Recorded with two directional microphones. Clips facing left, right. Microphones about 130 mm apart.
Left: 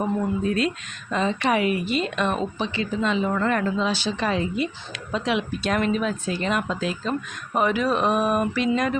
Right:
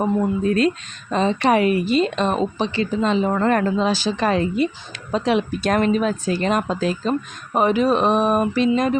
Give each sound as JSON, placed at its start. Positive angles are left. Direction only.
{"t": 1.1, "sound": "speech", "side_deg": -30}